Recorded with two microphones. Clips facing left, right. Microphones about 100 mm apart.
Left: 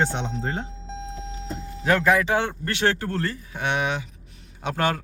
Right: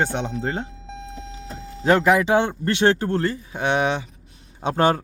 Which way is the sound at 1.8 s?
20° right (ahead or behind).